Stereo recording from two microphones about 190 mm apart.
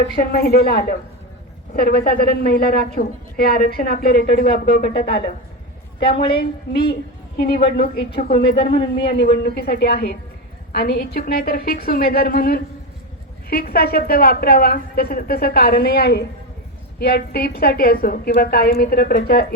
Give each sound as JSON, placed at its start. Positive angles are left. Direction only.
{"t": 0.2, "sound": "a woman's voice", "side_deg": 50}
{"t": 6.2, "sound": "a woman's voice", "side_deg": 55}
{"t": 8.5, "sound": "speech", "side_deg": 30}
{"t": 9.3, "sound": "a woman's voice", "side_deg": 60}